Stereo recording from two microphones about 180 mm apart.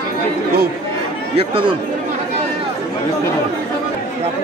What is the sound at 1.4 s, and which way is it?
Speech, 30° right (ahead or behind).